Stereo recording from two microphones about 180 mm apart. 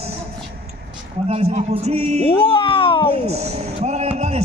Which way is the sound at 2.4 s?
30° left (ahead or behind).